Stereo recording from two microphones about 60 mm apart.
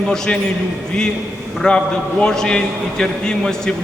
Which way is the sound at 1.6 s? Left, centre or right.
Centre.